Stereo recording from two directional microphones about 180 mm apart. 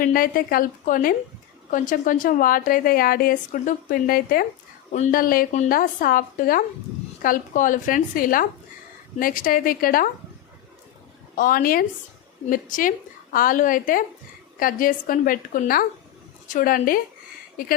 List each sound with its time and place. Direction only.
0.0 s a woman's voice: 55° left (ahead or behind)
4.9 s a woman's voice: 40° left (ahead or behind)
11.3 s a woman's voice: 50° left (ahead or behind)